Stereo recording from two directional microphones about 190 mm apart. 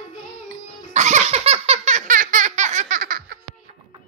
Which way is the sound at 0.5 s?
40° right (ahead or behind).